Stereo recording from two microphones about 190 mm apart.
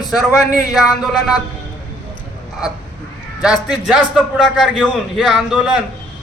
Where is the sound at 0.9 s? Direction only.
Centre (ahead or behind).